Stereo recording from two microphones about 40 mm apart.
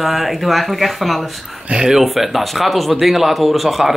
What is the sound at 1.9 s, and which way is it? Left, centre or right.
Speech, centre.